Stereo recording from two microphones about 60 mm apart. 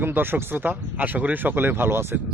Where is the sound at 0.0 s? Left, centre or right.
Right.